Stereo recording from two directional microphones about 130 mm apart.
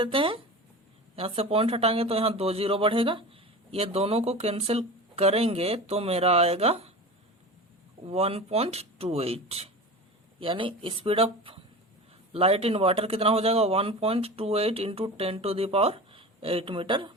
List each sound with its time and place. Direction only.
0.0 s speech: 40° right (ahead or behind)
8.0 s speech: 50° right (ahead or behind)